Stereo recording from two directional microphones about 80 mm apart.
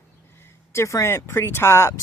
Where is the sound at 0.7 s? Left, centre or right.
Left.